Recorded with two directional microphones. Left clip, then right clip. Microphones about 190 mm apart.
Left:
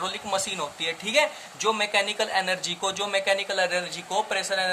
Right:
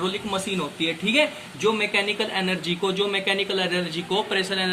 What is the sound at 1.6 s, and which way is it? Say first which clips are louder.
Speech: right 1 dB; 65° left (ahead or behind).